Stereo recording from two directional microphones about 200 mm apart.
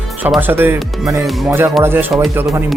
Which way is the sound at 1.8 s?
10° right (ahead or behind).